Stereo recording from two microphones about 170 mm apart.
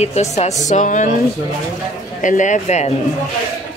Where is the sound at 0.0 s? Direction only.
40° left (ahead or behind).